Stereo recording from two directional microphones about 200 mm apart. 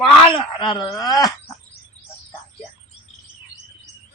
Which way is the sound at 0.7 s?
20° left (ahead or behind).